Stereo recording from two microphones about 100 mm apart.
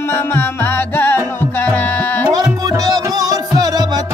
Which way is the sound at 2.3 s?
35° right (ahead or behind).